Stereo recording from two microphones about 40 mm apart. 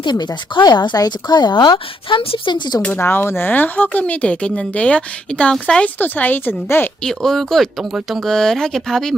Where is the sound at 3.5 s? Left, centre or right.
Left.